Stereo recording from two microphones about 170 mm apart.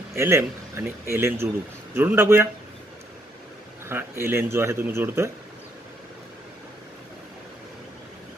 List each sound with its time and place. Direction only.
0.1 s speech: 15° right (ahead or behind)
3.9 s speech: 15° right (ahead or behind)